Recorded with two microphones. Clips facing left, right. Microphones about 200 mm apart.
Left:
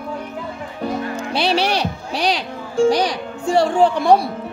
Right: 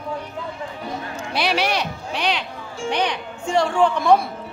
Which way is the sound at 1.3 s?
30° left (ahead or behind).